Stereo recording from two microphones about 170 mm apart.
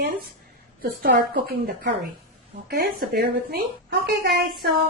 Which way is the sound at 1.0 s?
85° right.